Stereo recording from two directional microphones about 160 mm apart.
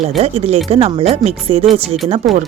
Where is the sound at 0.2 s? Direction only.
40° right (ahead or behind).